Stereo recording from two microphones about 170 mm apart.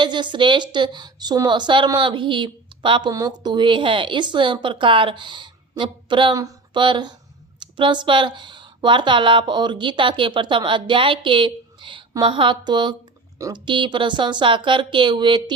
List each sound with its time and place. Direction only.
0.0 s a woman's voice: 25° right (ahead or behind)